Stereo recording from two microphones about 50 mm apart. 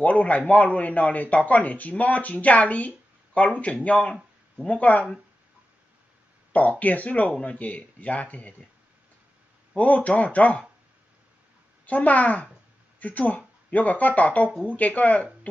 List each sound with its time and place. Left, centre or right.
0.0 s speech: left
6.8 s speech: left
9.8 s speech: left
11.8 s speech: left